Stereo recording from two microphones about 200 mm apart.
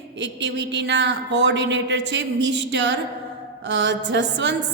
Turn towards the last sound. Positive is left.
turn(degrees=-60)  # may be behind; listen again after turning